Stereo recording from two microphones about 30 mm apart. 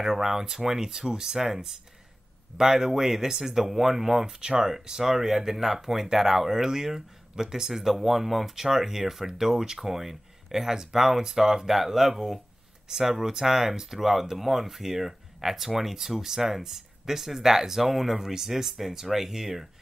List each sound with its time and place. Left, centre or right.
0.0 s speech: centre